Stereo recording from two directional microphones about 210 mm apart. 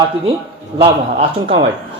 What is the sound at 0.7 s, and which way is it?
Speech, 30° right (ahead or behind).